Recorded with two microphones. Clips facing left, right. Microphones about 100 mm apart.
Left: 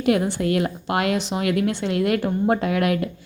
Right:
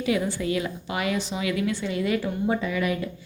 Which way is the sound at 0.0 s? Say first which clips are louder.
Left 5 dB; 60° left (ahead or behind).